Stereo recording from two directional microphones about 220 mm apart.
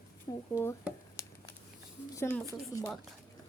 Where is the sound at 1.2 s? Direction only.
15° left (ahead or behind).